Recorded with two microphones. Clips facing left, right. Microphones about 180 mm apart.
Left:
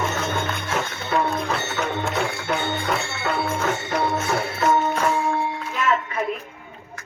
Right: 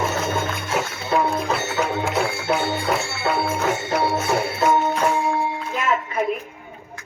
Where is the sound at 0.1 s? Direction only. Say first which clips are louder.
Right 2 dB; 5° right (ahead or behind).